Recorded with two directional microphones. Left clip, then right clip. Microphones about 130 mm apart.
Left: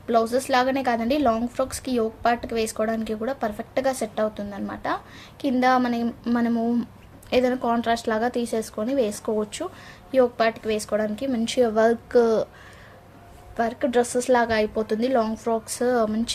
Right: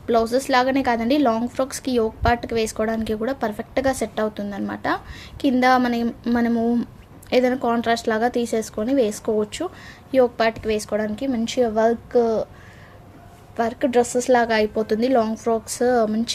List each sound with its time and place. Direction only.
0.1 s a woman's voice: 30° right (ahead or behind); by 11.3 s 15° right (ahead or behind)
11.3 s a woman's voice: centre (ahead or behind); by 12.5 s 15° left (ahead or behind)
13.6 s a woman's voice: 20° right (ahead or behind)